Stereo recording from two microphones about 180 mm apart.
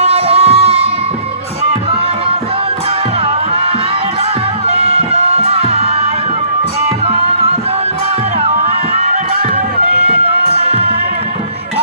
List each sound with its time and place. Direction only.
0.0 s music: 35° right (ahead or behind)
3.2 s music: 30° right (ahead or behind)
6.8 s tabla: 30° right (ahead or behind)
8.4 s music: 35° right (ahead or behind)
10.5 s music: 35° right (ahead or behind)